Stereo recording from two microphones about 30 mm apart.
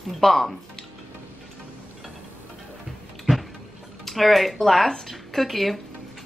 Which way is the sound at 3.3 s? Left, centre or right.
Right.